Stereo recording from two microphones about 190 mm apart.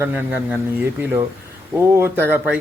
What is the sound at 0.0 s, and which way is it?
Speech, 10° right (ahead or behind).